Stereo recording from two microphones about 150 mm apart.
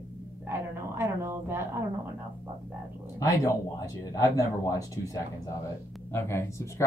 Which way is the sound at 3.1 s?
20° left (ahead or behind).